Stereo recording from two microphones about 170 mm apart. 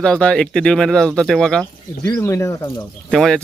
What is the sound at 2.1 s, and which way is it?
Speech, 15° left (ahead or behind).